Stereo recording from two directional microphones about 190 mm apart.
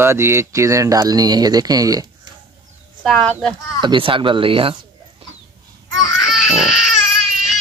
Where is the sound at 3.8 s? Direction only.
25° right (ahead or behind).